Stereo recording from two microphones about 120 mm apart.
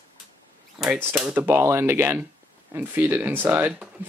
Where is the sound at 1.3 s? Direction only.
20° right (ahead or behind).